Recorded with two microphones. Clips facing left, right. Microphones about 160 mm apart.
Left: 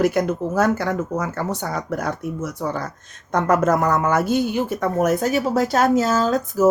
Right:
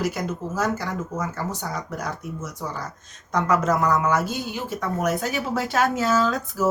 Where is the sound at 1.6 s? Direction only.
60° left (ahead or behind).